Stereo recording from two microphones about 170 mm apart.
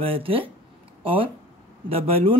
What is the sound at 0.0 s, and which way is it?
Speech, 35° right (ahead or behind).